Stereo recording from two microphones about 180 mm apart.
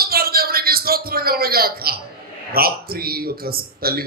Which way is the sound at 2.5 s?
55° right (ahead or behind).